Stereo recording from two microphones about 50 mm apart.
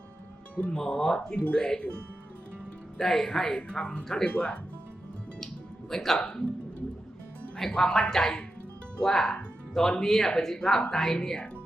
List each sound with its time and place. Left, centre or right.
0.5 s speech: left
0.8 s speech: centre
3.0 s speech: centre; by 4.6 s left
5.9 s speech: centre
6.1 s speech: centre
7.8 s speech: centre